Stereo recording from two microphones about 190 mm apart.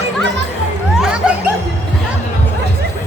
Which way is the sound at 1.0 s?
5° right (ahead or behind).